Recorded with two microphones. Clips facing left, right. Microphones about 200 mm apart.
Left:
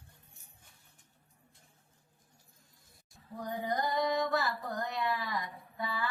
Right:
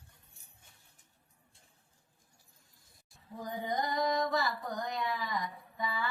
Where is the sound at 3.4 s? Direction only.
Centre (ahead or behind).